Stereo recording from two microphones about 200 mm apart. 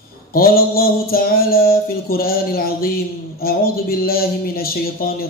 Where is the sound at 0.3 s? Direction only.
50° left (ahead or behind).